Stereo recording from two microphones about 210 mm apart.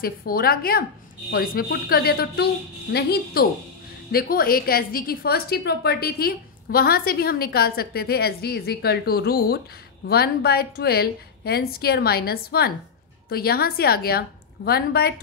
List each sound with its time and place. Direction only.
0.0 s a woman's voice: 45° left (ahead or behind)